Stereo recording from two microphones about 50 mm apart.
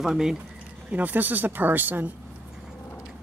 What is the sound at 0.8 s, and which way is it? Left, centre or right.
Speech, right.